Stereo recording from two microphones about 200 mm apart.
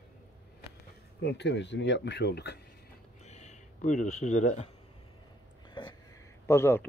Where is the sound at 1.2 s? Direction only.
60° left (ahead or behind).